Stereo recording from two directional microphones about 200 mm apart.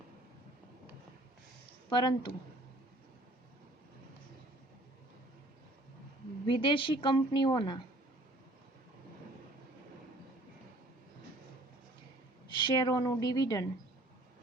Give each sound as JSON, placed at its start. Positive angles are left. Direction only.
{"t": 1.9, "sound": "a woman's voice", "side_deg": 20}
{"t": 6.5, "sound": "a woman's voice", "side_deg": 25}
{"t": 12.5, "sound": "a woman's voice", "side_deg": 20}